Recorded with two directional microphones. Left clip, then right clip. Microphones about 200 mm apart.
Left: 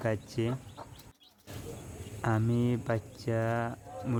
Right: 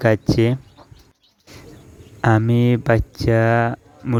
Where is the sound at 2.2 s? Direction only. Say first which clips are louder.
Right 14 dB; 40° right (ahead or behind).